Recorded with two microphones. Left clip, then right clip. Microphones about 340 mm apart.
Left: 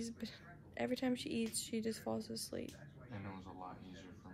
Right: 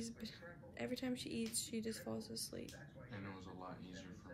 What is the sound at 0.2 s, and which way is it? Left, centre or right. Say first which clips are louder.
Speech: left 1 dB; centre.